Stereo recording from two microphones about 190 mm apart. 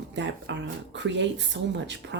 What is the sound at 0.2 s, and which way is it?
A woman's voice, 70° right (ahead or behind).